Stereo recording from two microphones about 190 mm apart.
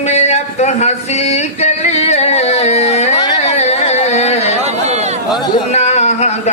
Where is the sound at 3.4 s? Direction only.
35° left (ahead or behind).